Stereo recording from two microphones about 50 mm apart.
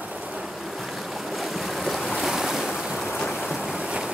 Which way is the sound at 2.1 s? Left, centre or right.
Centre.